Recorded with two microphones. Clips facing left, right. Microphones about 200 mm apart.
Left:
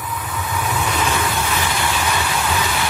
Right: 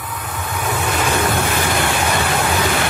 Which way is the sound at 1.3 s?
60° right (ahead or behind).